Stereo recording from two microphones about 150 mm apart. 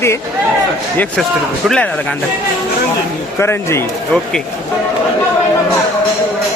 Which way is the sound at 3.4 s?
15° left (ahead or behind).